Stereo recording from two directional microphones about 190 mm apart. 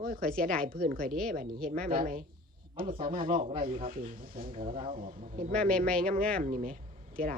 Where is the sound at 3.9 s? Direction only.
45° right (ahead or behind).